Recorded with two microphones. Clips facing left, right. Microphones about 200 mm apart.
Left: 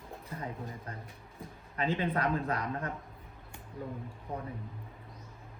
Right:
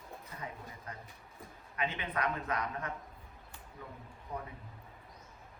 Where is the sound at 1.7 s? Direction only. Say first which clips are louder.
Left 5 dB; 30° left (ahead or behind).